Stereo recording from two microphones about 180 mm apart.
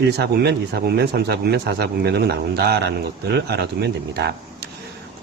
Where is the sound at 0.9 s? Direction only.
65° right (ahead or behind).